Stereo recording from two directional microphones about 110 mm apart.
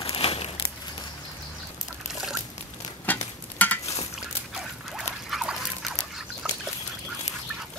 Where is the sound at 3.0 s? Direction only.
15° left (ahead or behind).